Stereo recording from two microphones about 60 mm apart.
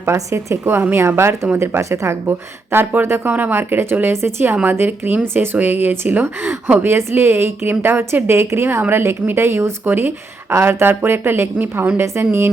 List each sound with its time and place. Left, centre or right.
0.0 s a woman's voice: right
0.6 s a woman's voice: right
0.9 s a woman's voice: right
2.7 s a woman's voice: right
4.6 s a woman's voice: right
6.2 s a woman's voice: right
9.8 s a woman's voice: right